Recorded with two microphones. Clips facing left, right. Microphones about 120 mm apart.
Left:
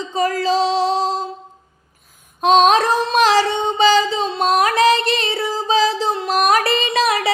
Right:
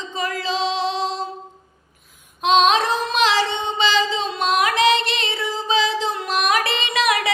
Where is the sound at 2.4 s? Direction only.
45° left (ahead or behind).